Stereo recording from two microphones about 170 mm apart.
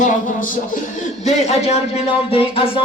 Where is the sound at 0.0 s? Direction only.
50° left (ahead or behind).